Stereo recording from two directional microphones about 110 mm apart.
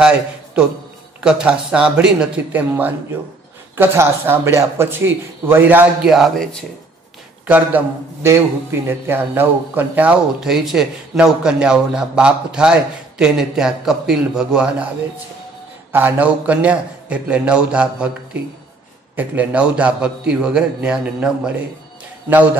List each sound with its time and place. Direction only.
1.2 s a man's voice: 10° right (ahead or behind)
3.7 s a man's voice: 20° right (ahead or behind)
6.0 s a man's voice: centre (ahead or behind)
7.4 s a man's voice: 15° right (ahead or behind)
10.4 s a man's voice: 5° right (ahead or behind)
15.9 s a man's voice: 20° right (ahead or behind)
19.1 s a man's voice: 10° right (ahead or behind)